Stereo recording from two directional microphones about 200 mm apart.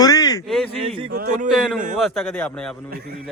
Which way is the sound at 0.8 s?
25° right (ahead or behind).